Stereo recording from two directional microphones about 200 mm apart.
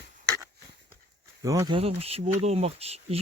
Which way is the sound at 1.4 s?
15° right (ahead or behind).